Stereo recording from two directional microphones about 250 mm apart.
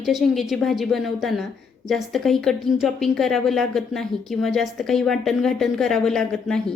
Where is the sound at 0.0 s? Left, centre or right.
Centre.